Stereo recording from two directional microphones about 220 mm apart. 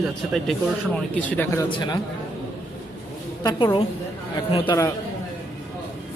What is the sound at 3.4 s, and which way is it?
A woman's voice, 20° left (ahead or behind).